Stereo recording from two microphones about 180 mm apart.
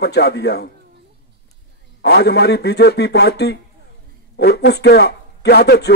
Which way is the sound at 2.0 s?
65° left (ahead or behind).